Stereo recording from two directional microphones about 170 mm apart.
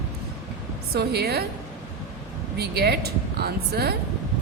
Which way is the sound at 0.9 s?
70° right (ahead or behind).